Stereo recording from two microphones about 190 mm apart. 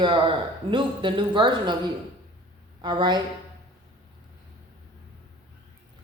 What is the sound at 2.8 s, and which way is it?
Speech, 25° right (ahead or behind).